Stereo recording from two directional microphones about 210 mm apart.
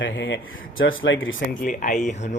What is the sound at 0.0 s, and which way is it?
Speech, 60° left (ahead or behind).